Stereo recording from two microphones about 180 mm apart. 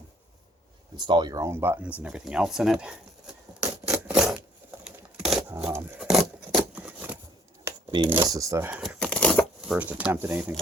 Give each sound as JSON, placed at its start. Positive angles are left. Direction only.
{"t": 0.9, "sound": "speech", "side_deg": -25}
{"t": 2.0, "sound": "a sound", "side_deg": -5}
{"t": 8.1, "sound": "speech", "side_deg": -15}
{"t": 8.8, "sound": "tearing", "side_deg": 0}
{"t": 9.7, "sound": "speech", "side_deg": -10}